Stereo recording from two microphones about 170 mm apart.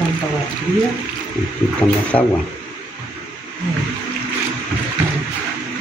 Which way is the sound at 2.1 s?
35° left (ahead or behind).